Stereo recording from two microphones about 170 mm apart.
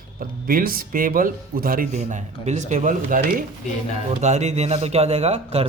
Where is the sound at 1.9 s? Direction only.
40° right (ahead or behind).